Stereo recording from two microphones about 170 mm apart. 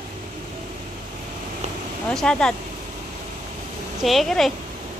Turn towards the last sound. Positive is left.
turn(degrees=0)  # may be behind; listen again after turning